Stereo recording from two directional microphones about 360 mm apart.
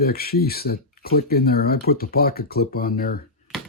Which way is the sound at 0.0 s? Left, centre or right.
Left.